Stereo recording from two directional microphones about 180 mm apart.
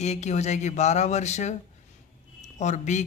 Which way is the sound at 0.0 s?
40° left (ahead or behind).